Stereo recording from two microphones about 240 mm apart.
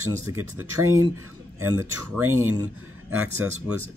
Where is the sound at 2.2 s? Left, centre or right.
Right.